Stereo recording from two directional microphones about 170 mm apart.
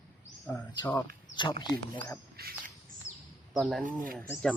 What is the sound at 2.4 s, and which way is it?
Bird, 65° right (ahead or behind).